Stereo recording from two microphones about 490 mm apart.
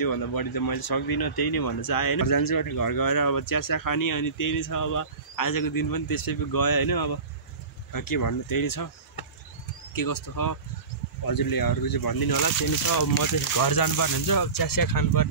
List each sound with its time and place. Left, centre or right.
0.0 s speech: left